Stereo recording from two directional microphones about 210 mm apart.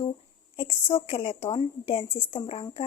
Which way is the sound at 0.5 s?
25° left (ahead or behind).